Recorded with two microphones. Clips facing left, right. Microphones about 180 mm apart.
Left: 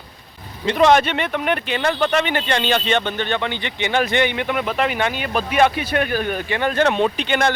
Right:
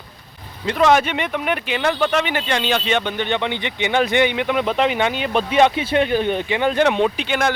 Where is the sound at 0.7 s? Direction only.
5° right (ahead or behind).